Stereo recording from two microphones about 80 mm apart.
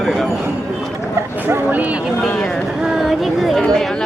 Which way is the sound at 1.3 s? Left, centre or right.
Right.